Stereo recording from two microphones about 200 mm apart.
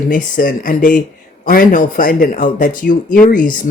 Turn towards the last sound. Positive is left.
turn(degrees=45)  # may be behind; listen again after turning